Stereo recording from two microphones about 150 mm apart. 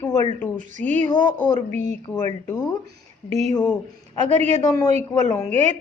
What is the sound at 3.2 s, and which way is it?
Speech, 45° right (ahead or behind).